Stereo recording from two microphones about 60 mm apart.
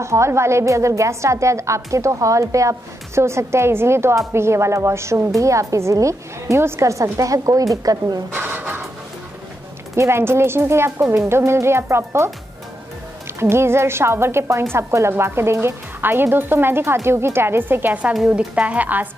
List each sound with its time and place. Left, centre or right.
0.0 s a woman's voice: right
8.3 s a sound: right
9.9 s a woman's voice: right
13.4 s a woman's voice: right